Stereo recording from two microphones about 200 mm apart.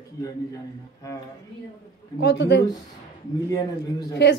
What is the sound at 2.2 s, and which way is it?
Speech, 60° left (ahead or behind).